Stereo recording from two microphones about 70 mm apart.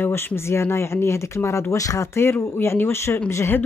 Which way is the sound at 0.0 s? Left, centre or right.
Left.